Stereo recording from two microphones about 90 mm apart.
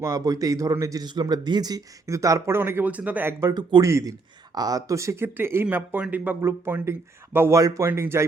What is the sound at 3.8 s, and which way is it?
Speech, 35° right (ahead or behind).